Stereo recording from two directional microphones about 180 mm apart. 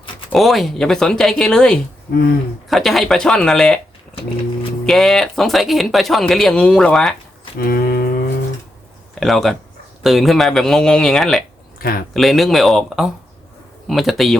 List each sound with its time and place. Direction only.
0.3 s speech: centre (ahead or behind)
4.9 s speech: centre (ahead or behind)
7.6 s a sound: 55° left (ahead or behind)
9.2 s speech: centre (ahead or behind)
11.8 s speech: 55° left (ahead or behind)
12.1 s speech: centre (ahead or behind)